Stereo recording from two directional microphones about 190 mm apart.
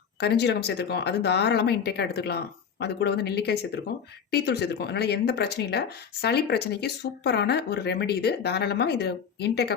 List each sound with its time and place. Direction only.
0.2 s speech: 60° left (ahead or behind)